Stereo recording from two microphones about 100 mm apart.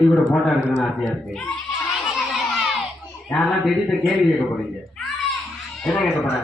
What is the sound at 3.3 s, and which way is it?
Speech, centre (ahead or behind).